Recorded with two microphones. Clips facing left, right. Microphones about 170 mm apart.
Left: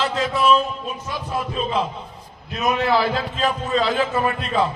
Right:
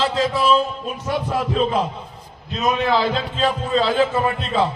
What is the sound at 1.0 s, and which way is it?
Heart murmur, 75° right (ahead or behind).